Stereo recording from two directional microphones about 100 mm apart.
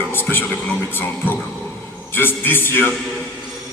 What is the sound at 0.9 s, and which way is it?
Speech, 20° left (ahead or behind).